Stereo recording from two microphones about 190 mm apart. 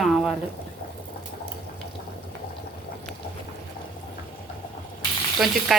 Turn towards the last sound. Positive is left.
turn(degrees=0)  # may be behind; listen again after turning